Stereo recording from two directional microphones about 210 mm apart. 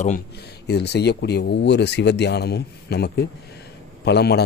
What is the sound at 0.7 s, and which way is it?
Speech, 50° left (ahead or behind).